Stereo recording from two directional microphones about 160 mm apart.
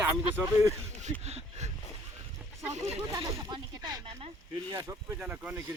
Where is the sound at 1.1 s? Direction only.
45° right (ahead or behind).